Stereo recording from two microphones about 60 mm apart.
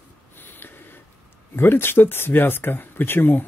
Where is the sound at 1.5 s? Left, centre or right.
Left.